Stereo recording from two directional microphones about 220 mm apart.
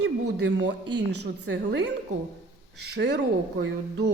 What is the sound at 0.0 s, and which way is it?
A woman's voice, 50° right (ahead or behind).